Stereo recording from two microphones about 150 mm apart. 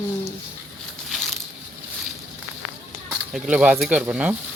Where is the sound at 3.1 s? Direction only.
5° right (ahead or behind).